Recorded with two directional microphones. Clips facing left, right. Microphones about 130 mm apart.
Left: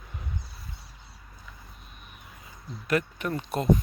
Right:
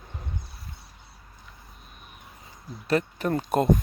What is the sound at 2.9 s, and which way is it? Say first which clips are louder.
Speech: right 2 dB; 30° right (ahead or behind).